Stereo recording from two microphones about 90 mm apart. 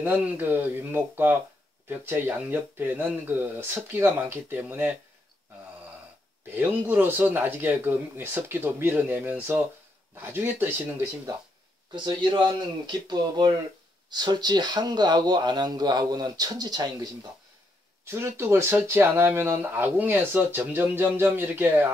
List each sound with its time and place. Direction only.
0.0 s speech: 20° right (ahead or behind)
6.5 s speech: 20° right (ahead or behind)
11.9 s speech: 60° right (ahead or behind)
18.0 s speech: 25° right (ahead or behind)